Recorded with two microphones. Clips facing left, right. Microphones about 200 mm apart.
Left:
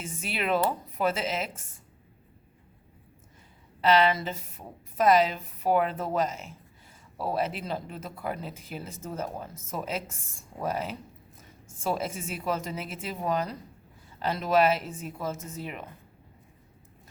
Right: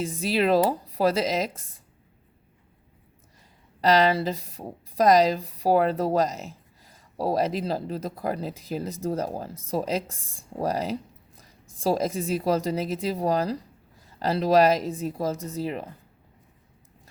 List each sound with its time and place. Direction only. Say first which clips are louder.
0.0 s speech: right 9 dB; 35° right (ahead or behind)
3.8 s speech: right 3 dB; 40° right (ahead or behind)